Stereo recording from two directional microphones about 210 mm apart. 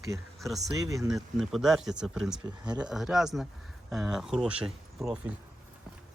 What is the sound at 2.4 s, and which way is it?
Speech, 20° right (ahead or behind).